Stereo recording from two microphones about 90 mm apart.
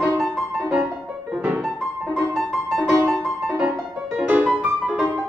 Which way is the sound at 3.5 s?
15° right (ahead or behind).